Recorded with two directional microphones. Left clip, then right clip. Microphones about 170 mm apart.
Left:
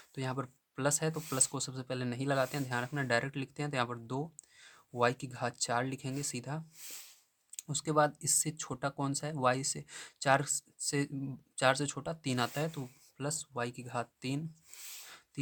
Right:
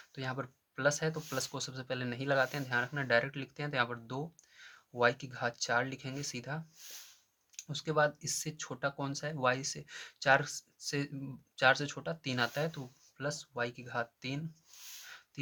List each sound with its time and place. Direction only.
0.1 s speech: 50° left (ahead or behind)